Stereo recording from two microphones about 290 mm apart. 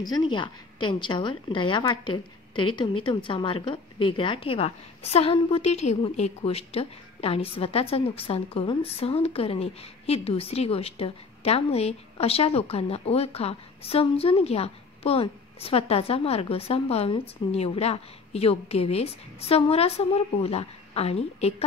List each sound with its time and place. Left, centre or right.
0.0 s a woman's voice: centre